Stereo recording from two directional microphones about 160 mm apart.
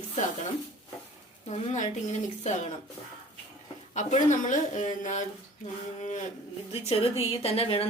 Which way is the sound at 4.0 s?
50° left (ahead or behind).